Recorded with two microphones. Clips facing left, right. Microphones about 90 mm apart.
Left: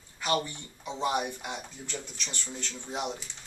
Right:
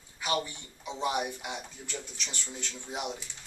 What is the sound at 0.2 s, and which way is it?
Speech, 10° right (ahead or behind).